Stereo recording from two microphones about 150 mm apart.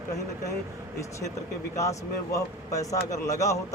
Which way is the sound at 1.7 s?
20° left (ahead or behind).